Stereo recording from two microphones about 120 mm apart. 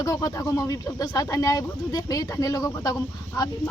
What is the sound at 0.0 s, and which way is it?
Speech, 30° left (ahead or behind).